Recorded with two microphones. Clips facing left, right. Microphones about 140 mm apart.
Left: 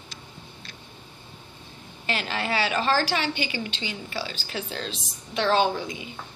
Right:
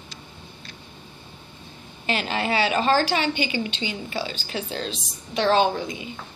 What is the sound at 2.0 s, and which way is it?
A woman's voice, 20° right (ahead or behind).